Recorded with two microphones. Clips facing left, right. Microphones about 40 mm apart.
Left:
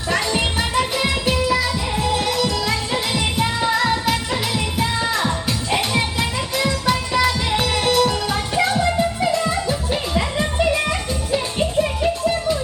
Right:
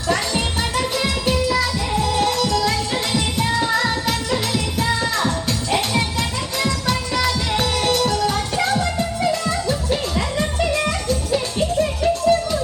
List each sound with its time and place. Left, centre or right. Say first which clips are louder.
0.1 s music: left 1 dB; centre